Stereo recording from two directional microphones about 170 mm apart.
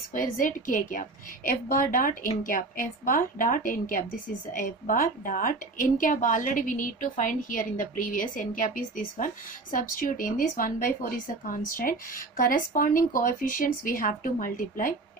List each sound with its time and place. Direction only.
0.1 s a woman's voice: 50° left (ahead or behind)